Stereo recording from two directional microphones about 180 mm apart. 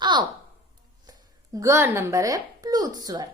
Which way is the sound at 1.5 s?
15° right (ahead or behind).